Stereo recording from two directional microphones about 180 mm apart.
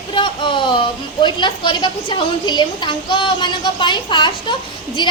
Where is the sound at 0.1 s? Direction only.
25° left (ahead or behind).